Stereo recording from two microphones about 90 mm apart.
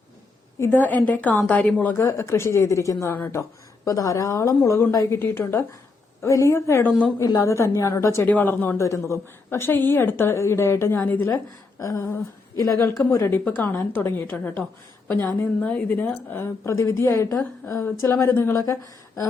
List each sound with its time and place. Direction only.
0.6 s a woman's voice: 20° left (ahead or behind)
8.3 s a woman's voice: 20° left (ahead or behind)
8.8 s a woman's voice: 35° left (ahead or behind)
11.8 s a woman's voice: 35° left (ahead or behind)
16.3 s a woman's voice: 30° left (ahead or behind)
18.5 s a woman's voice: 35° left (ahead or behind)